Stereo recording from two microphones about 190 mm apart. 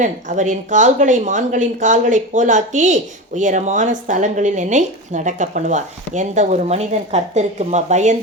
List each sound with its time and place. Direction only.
0.0 s a woman's voice: 40° right (ahead or behind)